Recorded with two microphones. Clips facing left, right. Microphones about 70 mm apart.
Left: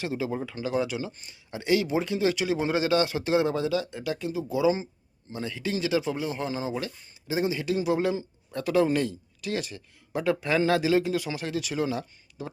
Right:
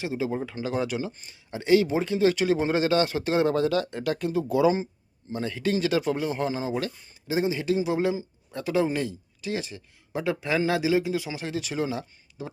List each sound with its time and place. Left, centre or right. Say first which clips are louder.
0.0 s speech: right 1 dB; right
0.6 s speech: left 1 dB; right
5.3 s speech: right 4 dB; right